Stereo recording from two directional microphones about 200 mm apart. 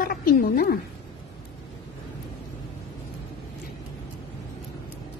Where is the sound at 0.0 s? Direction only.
45° left (ahead or behind).